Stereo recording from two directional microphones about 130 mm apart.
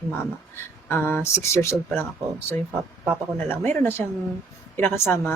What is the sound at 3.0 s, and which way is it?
Speech, 15° left (ahead or behind).